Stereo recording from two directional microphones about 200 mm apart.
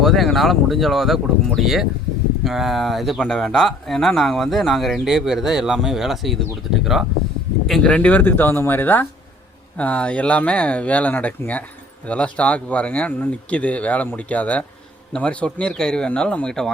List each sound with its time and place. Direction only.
0.0 s speech: centre (ahead or behind)
7.7 s speech: 5° left (ahead or behind)